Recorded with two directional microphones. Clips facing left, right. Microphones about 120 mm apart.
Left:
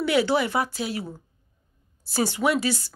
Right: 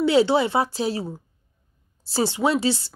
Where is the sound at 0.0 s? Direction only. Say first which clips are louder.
Right 4 dB; 25° right (ahead or behind).